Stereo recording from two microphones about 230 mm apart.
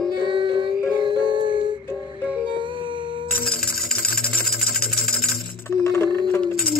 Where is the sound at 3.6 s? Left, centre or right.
Left.